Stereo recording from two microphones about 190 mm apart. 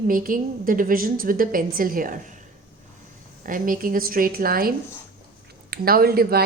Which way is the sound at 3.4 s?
45° right (ahead or behind).